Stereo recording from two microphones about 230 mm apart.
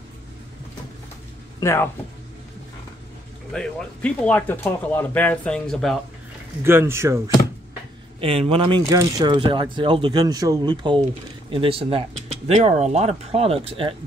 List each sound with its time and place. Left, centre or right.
1.6 s speech: centre
3.5 s speech: centre
6.6 s speech: centre
8.2 s speech: right